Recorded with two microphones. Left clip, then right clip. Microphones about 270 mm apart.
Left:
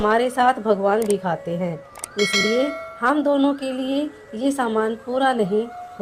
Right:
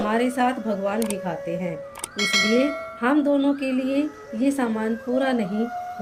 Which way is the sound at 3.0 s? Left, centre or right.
Left.